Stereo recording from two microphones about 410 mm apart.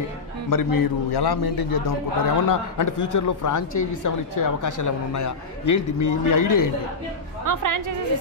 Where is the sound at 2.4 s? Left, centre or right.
Left.